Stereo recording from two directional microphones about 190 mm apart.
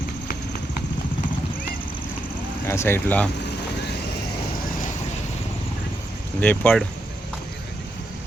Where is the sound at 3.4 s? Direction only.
60° left (ahead or behind).